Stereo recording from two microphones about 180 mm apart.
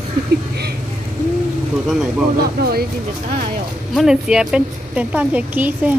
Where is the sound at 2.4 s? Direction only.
60° right (ahead or behind).